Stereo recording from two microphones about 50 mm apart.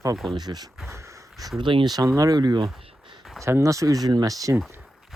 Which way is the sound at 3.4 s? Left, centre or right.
Right.